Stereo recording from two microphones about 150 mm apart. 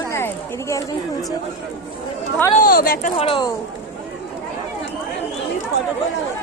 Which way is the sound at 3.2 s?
35° left (ahead or behind).